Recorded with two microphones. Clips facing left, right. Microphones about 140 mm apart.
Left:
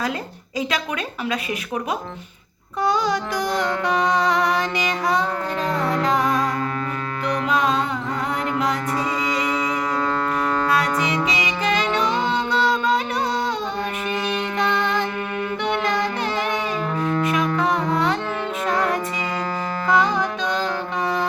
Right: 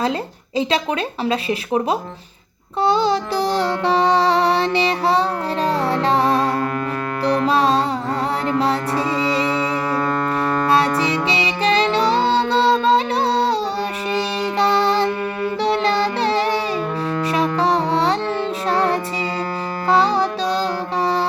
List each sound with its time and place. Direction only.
1.2 s speech: 30° right (ahead or behind)
2.8 s music: 30° right (ahead or behind)
10.7 s music: 30° right (ahead or behind)